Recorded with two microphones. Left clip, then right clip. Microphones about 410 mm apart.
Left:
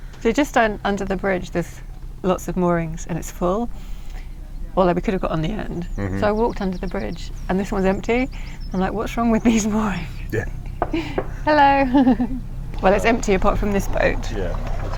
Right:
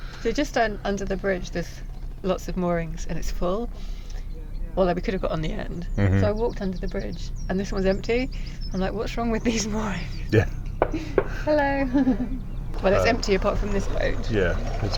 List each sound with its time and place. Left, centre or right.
0.2 s speech: left
4.7 s speech: left
10.2 s speech: right
10.9 s speech: left
13.7 s speech: left